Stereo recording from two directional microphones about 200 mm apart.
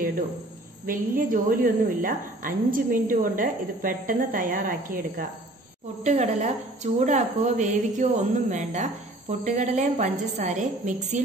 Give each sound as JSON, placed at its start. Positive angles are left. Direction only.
{"t": 0.8, "sound": "a woman's voice", "side_deg": -45}
{"t": 6.0, "sound": "a woman's voice", "side_deg": -35}